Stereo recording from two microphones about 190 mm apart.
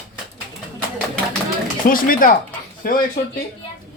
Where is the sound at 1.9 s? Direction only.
45° left (ahead or behind).